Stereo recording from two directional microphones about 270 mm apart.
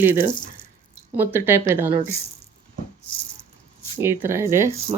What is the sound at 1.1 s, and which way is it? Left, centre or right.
Speech, centre.